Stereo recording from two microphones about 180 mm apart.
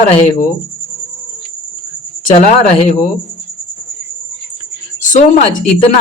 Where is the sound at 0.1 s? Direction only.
40° left (ahead or behind).